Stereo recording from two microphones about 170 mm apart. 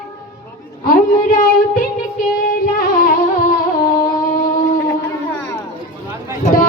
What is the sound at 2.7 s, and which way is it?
Music, 55° left (ahead or behind).